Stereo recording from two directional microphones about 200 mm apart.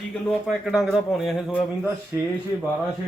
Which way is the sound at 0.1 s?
Centre (ahead or behind).